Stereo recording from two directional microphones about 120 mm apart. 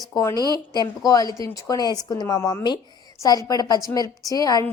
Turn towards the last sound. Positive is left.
turn(degrees=30)  # may be behind; listen again after turning